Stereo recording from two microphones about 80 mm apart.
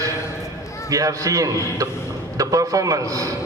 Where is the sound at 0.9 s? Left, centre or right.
Right.